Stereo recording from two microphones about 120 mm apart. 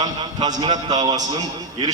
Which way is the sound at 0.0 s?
40° right (ahead or behind).